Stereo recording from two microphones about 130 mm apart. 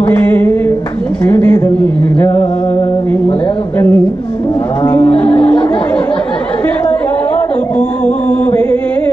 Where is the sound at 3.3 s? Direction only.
45° left (ahead or behind).